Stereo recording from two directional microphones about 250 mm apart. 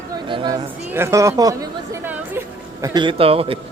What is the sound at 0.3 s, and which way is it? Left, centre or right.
A man's voice, centre.